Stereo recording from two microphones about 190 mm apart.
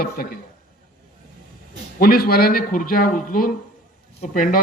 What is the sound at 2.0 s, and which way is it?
Speech, 50° left (ahead or behind).